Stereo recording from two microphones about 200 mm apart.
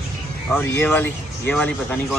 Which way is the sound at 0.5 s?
10° left (ahead or behind).